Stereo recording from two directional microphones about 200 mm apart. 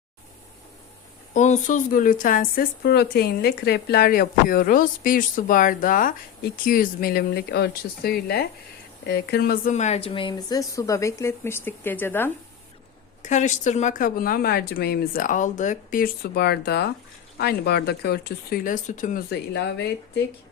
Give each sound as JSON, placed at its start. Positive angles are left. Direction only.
{"t": 1.3, "sound": "speech", "side_deg": 40}
{"t": 9.7, "sound": "speech", "side_deg": 35}
{"t": 13.2, "sound": "speech", "side_deg": 35}